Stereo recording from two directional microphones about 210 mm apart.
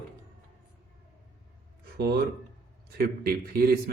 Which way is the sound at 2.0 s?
50° right (ahead or behind).